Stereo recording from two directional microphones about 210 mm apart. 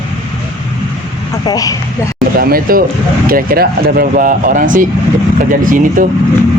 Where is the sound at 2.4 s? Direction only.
45° right (ahead or behind).